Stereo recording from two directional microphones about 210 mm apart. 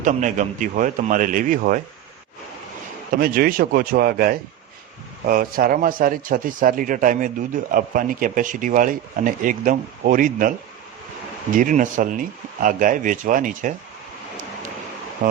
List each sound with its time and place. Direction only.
0.0 s speech: 35° right (ahead or behind)
3.2 s speech: 45° right (ahead or behind)
11.5 s speech: 40° right (ahead or behind)
15.2 s speech: 40° right (ahead or behind)